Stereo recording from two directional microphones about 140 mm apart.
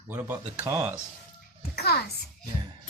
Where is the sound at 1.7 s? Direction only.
90° left.